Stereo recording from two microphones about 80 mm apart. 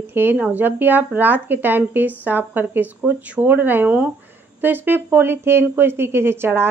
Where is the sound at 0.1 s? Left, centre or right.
Right.